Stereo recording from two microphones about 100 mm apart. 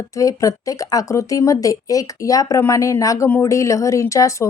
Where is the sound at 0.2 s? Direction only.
35° left (ahead or behind).